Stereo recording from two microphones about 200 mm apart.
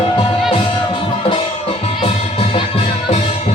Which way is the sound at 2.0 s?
30° left (ahead or behind).